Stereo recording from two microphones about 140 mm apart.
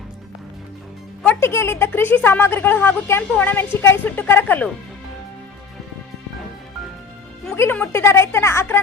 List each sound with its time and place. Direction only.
1.4 s speech: 20° left (ahead or behind)
7.5 s a woman's voice: 15° left (ahead or behind)